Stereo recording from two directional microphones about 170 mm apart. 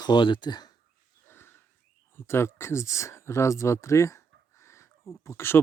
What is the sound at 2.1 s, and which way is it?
Speech, 15° left (ahead or behind).